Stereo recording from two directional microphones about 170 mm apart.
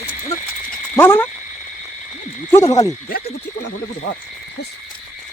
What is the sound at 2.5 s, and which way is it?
Owl, 20° left (ahead or behind).